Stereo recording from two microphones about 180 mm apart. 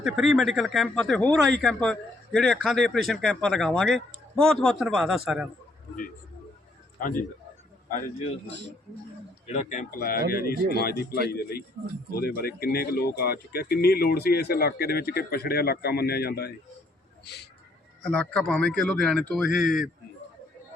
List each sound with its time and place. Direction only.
0.0 s speech: centre (ahead or behind)
9.5 s speech: 40° left (ahead or behind); by 16.5 s 60° left (ahead or behind)
18.0 s speech: 5° left (ahead or behind)